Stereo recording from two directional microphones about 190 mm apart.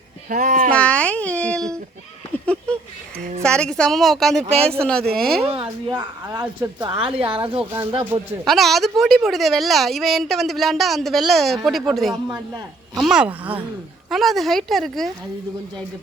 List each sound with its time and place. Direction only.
0.3 s speech: 45° right (ahead or behind)
0.7 s a child's voice: 5° left (ahead or behind)
3.4 s a woman's voice: 5° left (ahead or behind)
4.4 s speech: 30° right (ahead or behind)
4.8 s a woman's voice: 5° left (ahead or behind)
5.4 s a woman's voice: 30° right (ahead or behind)
6.4 s speech: 10° right (ahead or behind)
7.0 s a woman's voice: 30° right (ahead or behind)
8.4 s a woman's voice: centre (ahead or behind)